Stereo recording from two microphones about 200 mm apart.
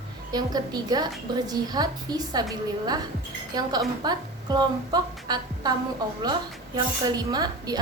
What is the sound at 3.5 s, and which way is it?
A woman's voice, 20° right (ahead or behind).